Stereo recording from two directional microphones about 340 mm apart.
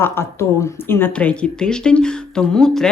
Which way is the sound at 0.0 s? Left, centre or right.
Centre.